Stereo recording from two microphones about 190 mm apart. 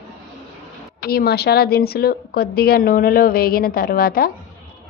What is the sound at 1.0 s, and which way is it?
A woman's voice, 55° left (ahead or behind).